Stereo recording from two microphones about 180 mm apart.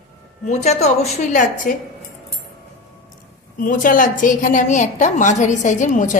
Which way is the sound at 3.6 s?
50° left (ahead or behind).